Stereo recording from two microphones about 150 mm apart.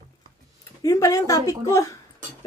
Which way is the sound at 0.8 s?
20° left (ahead or behind).